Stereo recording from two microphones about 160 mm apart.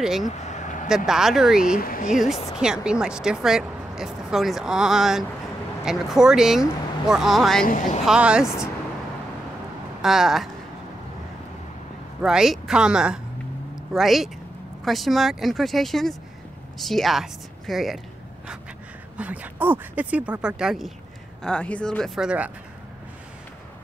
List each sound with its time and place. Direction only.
0.0 s speech: centre (ahead or behind)
0.3 s vehicle: 45° left (ahead or behind)
0.8 s speech: 5° right (ahead or behind)
1.8 s speech: 60° left (ahead or behind)
2.5 s speech: 5° right (ahead or behind)
7.6 s a woman's voice: 55° left (ahead or behind)
8.0 s speech: 5° right (ahead or behind)
10.0 s speech: centre (ahead or behind)
12.2 s speech: 5° right (ahead or behind)
19.1 s speech: 10° right (ahead or behind)